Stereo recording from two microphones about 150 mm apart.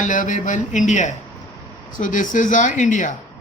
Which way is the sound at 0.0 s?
60° left (ahead or behind).